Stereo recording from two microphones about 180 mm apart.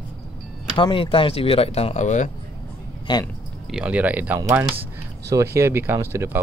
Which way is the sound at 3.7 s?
5° right (ahead or behind).